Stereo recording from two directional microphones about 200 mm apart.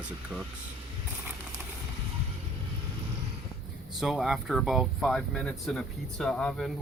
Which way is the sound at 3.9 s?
Centre (ahead or behind).